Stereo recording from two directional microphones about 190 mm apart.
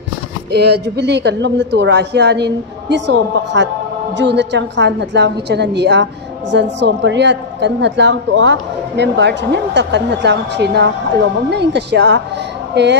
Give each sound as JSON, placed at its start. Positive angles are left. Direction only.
{"t": 0.5, "sound": "a woman's voice", "side_deg": -60}